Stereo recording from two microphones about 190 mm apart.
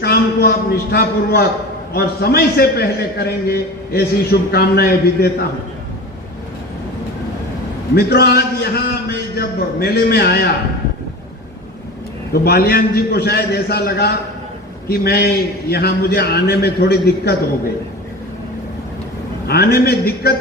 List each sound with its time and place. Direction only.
0.0 s a man's voice: 55° left (ahead or behind)
7.9 s a man's voice: 60° left (ahead or behind)
12.3 s a man's voice: 55° left (ahead or behind)
19.5 s a man's voice: 55° left (ahead or behind)